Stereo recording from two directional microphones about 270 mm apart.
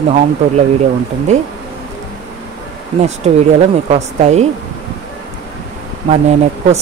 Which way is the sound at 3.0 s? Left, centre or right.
Right.